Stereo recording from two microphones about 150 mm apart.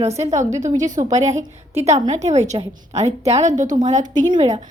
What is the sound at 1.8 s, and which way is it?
A woman's voice, 50° right (ahead or behind).